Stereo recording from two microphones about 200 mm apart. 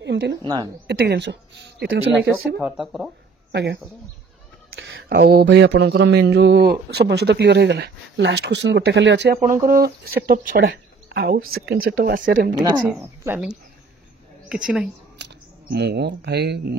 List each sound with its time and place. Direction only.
0.0 s speech: 60° right (ahead or behind)
0.4 s speech: 20° right (ahead or behind)
0.8 s a sound: 55° right (ahead or behind)
2.6 s speech: centre (ahead or behind)
3.5 s a sound: 60° right (ahead or behind)
9.4 s speech: 40° right (ahead or behind)
10.7 s a sound: 55° right (ahead or behind)
11.5 s speech: 50° right (ahead or behind)
12.8 s speech: 10° right (ahead or behind)
15.1 s speech: 60° right (ahead or behind)